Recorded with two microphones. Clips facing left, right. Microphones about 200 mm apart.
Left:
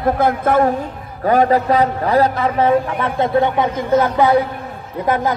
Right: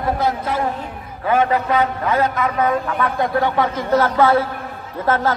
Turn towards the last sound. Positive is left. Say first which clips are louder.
# left 1 dB
turn(degrees=15)  # may be behind; listen again after turning